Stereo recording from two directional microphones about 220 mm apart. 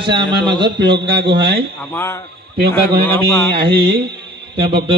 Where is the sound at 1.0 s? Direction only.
20° right (ahead or behind).